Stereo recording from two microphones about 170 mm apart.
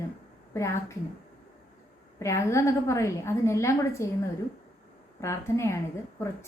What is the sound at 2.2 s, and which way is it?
A woman's voice, 15° left (ahead or behind).